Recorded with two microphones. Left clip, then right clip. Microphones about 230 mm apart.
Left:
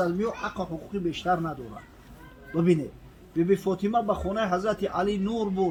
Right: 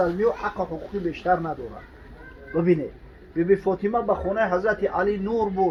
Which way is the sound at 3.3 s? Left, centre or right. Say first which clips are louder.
Right 4 dB; left.